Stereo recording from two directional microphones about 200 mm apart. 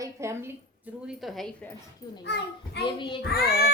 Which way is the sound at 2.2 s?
55° left (ahead or behind).